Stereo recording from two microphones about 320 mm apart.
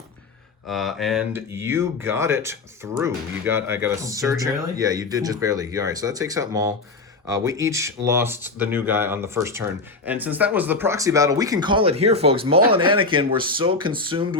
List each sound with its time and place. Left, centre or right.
0.7 s speech: centre